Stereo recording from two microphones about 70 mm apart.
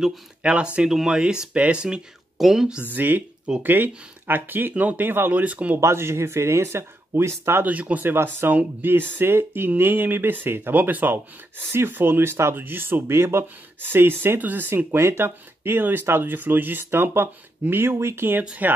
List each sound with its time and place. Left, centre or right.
0.0 s speech: centre
3.0 s speech: right
5.8 s speech: right
7.6 s speech: right
18.4 s speech: centre